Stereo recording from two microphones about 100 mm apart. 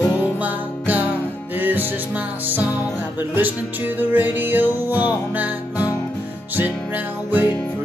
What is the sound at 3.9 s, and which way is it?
Music, 20° right (ahead or behind).